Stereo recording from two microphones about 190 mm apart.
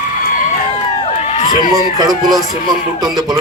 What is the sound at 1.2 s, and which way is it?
Crowd, 35° left (ahead or behind).